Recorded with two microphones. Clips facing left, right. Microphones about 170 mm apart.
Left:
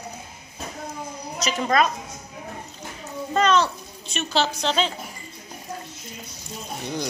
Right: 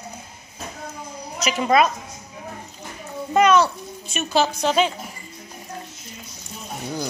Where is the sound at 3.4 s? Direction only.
10° right (ahead or behind).